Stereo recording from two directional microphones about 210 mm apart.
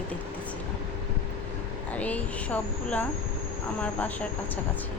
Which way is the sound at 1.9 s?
5° left (ahead or behind).